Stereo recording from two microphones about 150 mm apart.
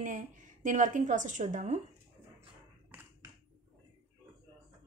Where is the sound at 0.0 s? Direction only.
60° right (ahead or behind).